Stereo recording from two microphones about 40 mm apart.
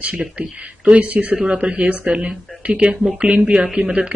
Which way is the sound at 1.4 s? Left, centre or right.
Right.